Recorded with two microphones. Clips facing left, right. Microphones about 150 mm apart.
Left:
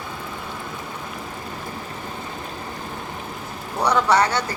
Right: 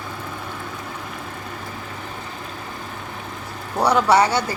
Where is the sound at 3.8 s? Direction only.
10° right (ahead or behind).